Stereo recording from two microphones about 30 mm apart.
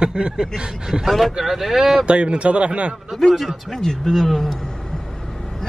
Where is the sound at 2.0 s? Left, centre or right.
Right.